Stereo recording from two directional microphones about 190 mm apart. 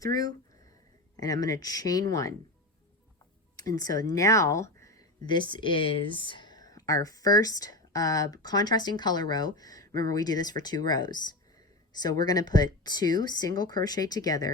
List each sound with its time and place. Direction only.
0.0 s speech: 20° left (ahead or behind)
3.8 s speech: 20° left (ahead or behind)